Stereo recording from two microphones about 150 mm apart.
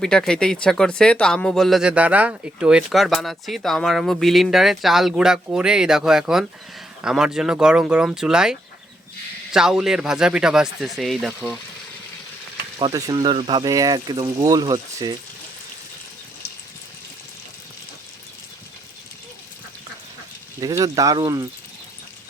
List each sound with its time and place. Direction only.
0.0 s speech: 5° left (ahead or behind)
12.8 s speech: 25° right (ahead or behind)
20.6 s speech: 25° right (ahead or behind)